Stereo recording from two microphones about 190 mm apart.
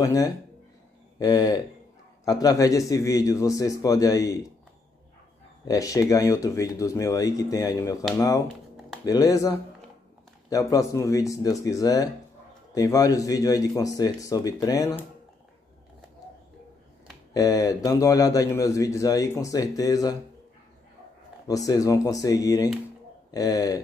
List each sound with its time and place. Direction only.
0.0 s speech: 15° left (ahead or behind)
5.7 s speech: 15° left (ahead or behind)
17.3 s speech: 20° left (ahead or behind)
21.5 s speech: 20° left (ahead or behind)